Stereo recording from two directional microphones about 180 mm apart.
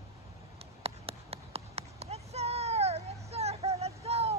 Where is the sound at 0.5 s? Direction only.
35° right (ahead or behind).